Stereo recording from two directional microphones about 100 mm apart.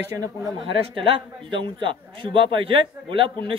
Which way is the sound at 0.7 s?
65° right (ahead or behind).